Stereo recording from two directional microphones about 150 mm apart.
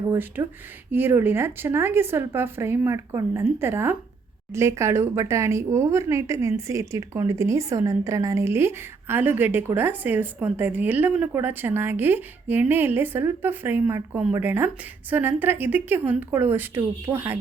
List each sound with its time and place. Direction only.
0.1 s speech: 15° right (ahead or behind)